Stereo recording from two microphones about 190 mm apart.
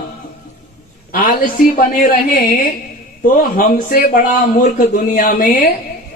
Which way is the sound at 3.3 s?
45° left (ahead or behind).